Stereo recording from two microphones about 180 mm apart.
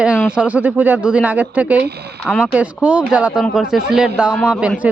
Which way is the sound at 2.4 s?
5° right (ahead or behind).